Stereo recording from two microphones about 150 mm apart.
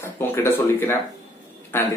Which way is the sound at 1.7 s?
15° left (ahead or behind).